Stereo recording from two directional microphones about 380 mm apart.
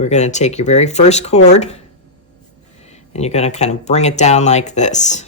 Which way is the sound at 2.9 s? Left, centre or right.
Centre.